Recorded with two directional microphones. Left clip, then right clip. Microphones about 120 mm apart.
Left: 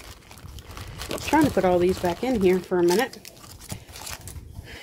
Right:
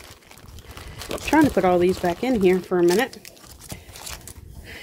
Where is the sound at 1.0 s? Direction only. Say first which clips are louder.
Right 1 dB; 20° right (ahead or behind).